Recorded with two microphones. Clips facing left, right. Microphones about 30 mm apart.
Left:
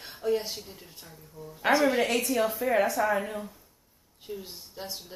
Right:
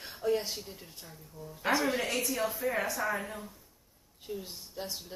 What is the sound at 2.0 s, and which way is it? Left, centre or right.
Speech, left.